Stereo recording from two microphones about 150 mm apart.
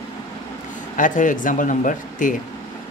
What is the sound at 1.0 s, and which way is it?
Speech, 60° left (ahead or behind).